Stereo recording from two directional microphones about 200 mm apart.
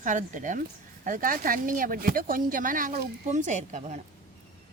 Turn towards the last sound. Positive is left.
turn(degrees=-35)  # may be behind; listen again after turning